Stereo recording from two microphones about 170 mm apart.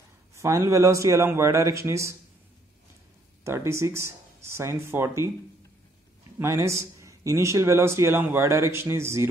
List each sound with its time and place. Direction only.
0.4 s a man's voice: 15° right (ahead or behind)
3.4 s a man's voice: 15° right (ahead or behind)
6.4 s a man's voice: 15° right (ahead or behind)